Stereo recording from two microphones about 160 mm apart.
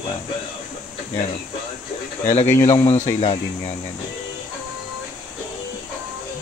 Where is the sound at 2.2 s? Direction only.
40° left (ahead or behind).